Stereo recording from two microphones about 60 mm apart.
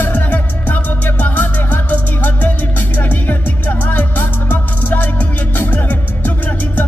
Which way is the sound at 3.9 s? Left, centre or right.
Left.